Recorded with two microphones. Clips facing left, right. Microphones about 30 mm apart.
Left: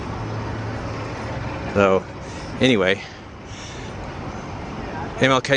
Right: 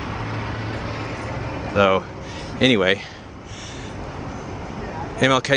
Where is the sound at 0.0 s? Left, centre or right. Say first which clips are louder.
Right 1 dB; right.